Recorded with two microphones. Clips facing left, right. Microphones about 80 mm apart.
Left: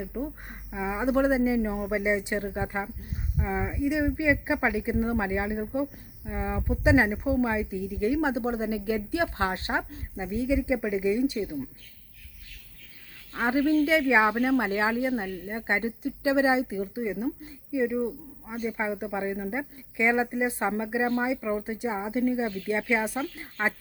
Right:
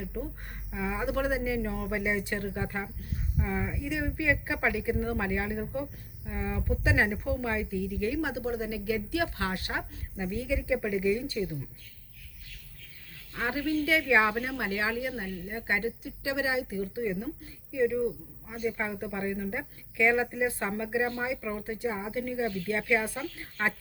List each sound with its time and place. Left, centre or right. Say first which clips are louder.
0.0 s speech: left 4 dB; left
13.3 s speech: left 6 dB; left